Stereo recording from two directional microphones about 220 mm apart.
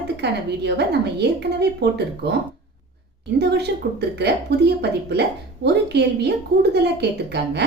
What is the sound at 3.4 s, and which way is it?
A woman's voice, 50° right (ahead or behind).